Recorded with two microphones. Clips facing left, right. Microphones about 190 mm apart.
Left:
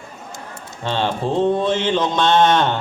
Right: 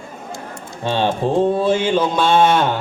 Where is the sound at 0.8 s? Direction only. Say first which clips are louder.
Right 3 dB; 15° right (ahead or behind).